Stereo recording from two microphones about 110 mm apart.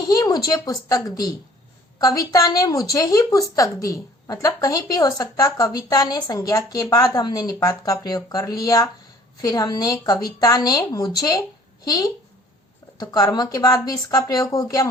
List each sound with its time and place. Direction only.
0.1 s a woman's voice: 35° left (ahead or behind)